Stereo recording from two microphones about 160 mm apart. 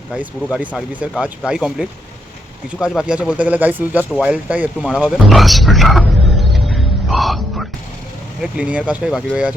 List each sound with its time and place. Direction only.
1.0 s speech: 5° right (ahead or behind)